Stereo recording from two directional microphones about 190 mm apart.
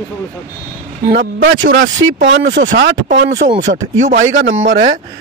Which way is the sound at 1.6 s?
80° right.